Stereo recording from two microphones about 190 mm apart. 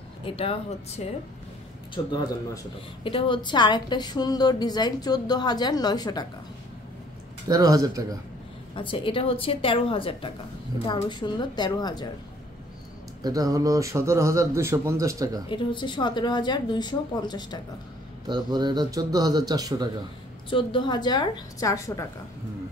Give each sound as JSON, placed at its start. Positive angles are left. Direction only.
{"t": 0.2, "sound": "a woman's voice", "side_deg": 30}
{"t": 7.4, "sound": "speech", "side_deg": -20}
{"t": 8.7, "sound": "a woman's voice", "side_deg": 30}
{"t": 13.2, "sound": "a man's voice", "side_deg": -20}
{"t": 15.4, "sound": "a woman's voice", "side_deg": 25}
{"t": 18.2, "sound": "speech", "side_deg": -20}
{"t": 20.4, "sound": "a woman's voice", "side_deg": 25}